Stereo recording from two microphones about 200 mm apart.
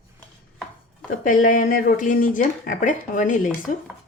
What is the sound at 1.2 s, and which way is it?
Speech, 40° left (ahead or behind).